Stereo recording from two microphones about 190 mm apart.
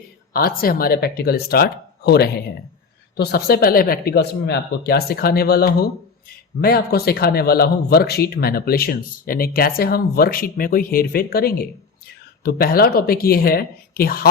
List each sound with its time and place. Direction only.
0.3 s speech: 50° left (ahead or behind)